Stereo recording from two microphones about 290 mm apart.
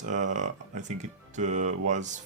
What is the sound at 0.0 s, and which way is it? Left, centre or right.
Speech, right.